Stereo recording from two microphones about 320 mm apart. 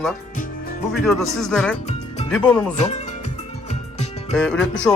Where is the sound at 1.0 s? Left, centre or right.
Centre.